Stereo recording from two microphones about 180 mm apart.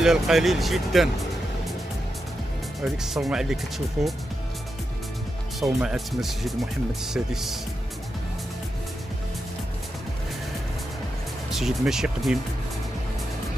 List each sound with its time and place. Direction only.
0.0 s speech: centre (ahead or behind)
2.8 s speech: centre (ahead or behind)
5.6 s speech: centre (ahead or behind)
11.5 s speech: centre (ahead or behind)